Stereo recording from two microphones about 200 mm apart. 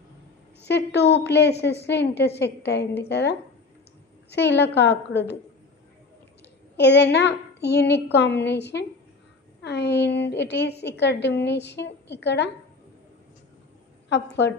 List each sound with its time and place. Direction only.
0.7 s a woman's voice: 60° left (ahead or behind)
6.8 s a woman's voice: 60° left (ahead or behind)
14.0 s a woman's voice: 60° left (ahead or behind)